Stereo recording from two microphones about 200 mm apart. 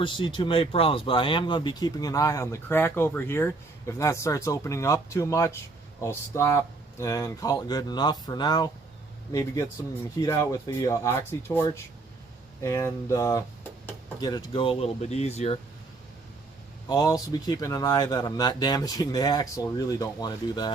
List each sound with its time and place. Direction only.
0.0 s speech: 25° left (ahead or behind)
16.9 s speech: 20° left (ahead or behind)